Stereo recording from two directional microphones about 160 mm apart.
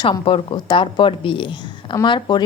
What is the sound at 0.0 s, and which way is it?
A woman's voice, 30° left (ahead or behind).